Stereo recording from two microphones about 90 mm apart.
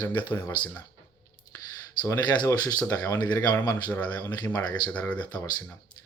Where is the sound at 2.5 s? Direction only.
45° left (ahead or behind).